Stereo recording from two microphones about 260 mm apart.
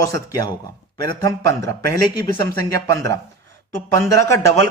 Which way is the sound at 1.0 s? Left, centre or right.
Centre.